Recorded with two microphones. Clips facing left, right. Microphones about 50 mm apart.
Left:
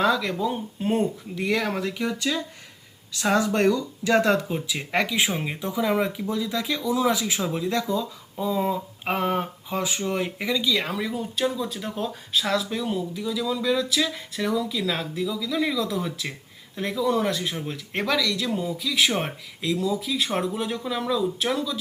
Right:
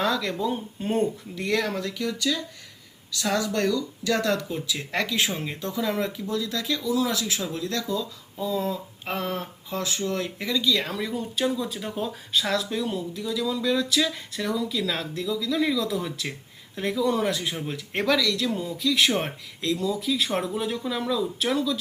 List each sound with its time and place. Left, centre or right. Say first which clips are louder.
0.0 s speech: left 3 dB; centre